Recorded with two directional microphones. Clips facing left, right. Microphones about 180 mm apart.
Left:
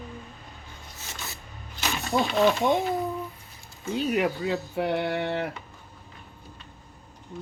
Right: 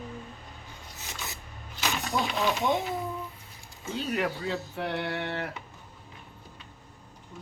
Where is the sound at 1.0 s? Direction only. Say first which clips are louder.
Even; 15° right (ahead or behind).